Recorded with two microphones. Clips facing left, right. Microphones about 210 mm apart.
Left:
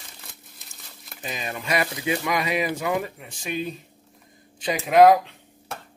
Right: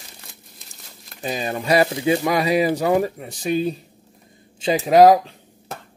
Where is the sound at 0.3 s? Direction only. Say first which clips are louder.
Right 2 dB; centre (ahead or behind).